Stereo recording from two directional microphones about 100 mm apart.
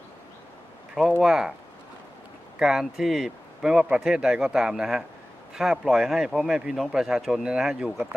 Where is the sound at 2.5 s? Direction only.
5° right (ahead or behind).